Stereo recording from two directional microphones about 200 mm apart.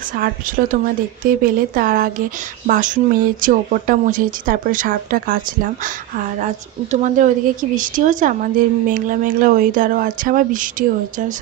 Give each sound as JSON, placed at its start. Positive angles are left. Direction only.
{"t": 0.1, "sound": "a woman's voice", "side_deg": -45}